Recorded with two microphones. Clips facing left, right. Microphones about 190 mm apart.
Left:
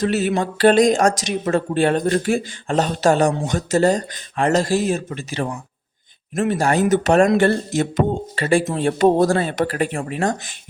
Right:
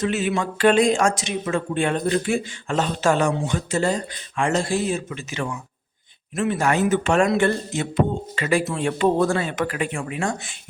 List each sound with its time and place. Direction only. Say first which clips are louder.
0.0 s speech: left 3 dB; 40° left (ahead or behind)
8.4 s speech: left 3 dB; 30° left (ahead or behind)